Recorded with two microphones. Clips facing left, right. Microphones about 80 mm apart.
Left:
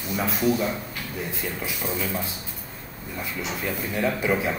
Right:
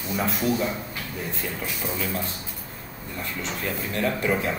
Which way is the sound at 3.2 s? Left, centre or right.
Centre.